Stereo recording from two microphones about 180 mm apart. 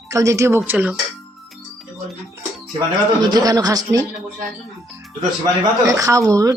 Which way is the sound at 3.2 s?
20° right (ahead or behind).